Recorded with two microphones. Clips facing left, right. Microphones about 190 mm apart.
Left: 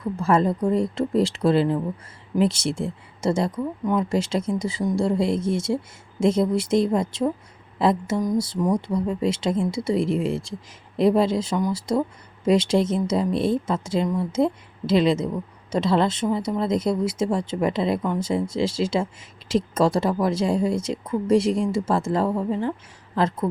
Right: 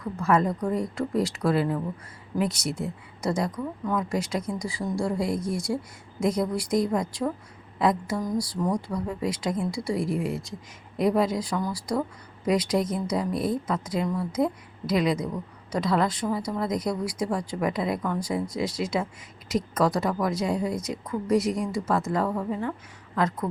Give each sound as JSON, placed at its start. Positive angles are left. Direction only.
{"t": 0.0, "sound": "speech", "side_deg": 30}